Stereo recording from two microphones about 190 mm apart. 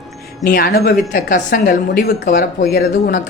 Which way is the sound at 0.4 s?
50° left (ahead or behind).